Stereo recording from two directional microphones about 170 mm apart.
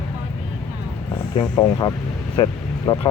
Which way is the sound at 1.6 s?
30° left (ahead or behind).